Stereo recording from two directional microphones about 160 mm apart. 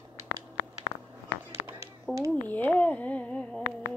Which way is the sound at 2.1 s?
15° right (ahead or behind).